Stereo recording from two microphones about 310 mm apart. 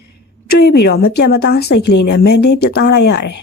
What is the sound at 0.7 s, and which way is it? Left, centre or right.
A woman's voice, left.